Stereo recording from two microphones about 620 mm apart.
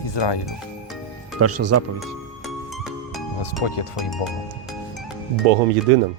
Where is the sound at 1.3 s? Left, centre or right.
Right.